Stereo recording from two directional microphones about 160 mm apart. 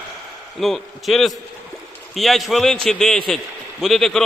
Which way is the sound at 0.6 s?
Centre (ahead or behind).